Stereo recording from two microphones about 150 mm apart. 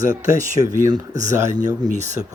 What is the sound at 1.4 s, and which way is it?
Speech, 55° right (ahead or behind).